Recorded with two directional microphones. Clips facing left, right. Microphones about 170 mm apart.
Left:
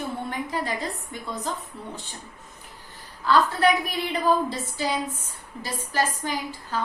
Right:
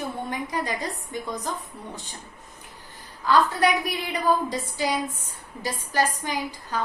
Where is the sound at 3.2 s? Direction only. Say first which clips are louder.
Even; 15° right (ahead or behind).